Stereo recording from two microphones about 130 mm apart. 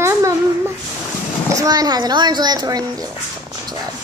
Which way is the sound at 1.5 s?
25° right (ahead or behind).